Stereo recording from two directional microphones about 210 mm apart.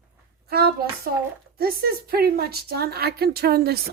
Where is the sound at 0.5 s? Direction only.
45° right (ahead or behind).